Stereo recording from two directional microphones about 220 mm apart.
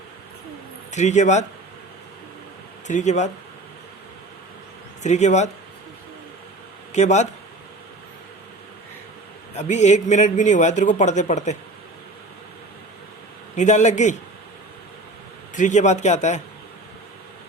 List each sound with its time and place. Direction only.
0.9 s a man's voice: 30° left (ahead or behind)
2.8 s a man's voice: 35° left (ahead or behind)
5.0 s a man's voice: 30° left (ahead or behind)
6.9 s a man's voice: 30° left (ahead or behind)
9.6 s a man's voice: 30° left (ahead or behind)
13.6 s a man's voice: 35° left (ahead or behind)
15.5 s a man's voice: 35° left (ahead or behind)